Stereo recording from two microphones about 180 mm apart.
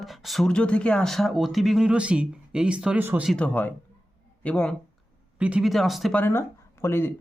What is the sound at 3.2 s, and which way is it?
A man's voice, 5° left (ahead or behind).